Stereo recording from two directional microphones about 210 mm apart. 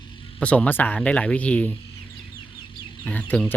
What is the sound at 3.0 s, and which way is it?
Speech, 5° left (ahead or behind).